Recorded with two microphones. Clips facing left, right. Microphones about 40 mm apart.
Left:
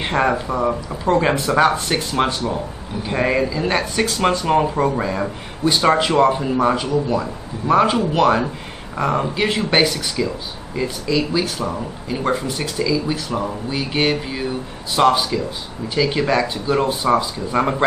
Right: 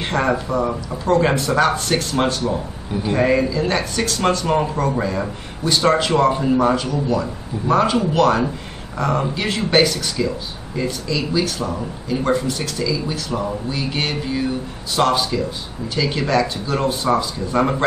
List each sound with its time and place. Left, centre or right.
0.0 s speech: centre
5.6 s speech: left
11.4 s speech: left